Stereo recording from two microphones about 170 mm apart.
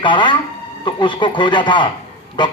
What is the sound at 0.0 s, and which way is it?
A man's voice, 30° left (ahead or behind).